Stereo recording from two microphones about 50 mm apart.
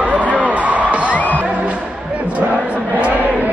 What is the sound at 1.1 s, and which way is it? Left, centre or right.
Music, left.